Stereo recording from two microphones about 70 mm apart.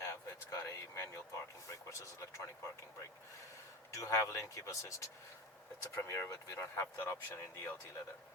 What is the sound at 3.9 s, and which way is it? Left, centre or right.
Speech, left.